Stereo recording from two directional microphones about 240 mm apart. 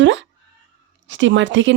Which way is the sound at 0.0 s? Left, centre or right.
Right.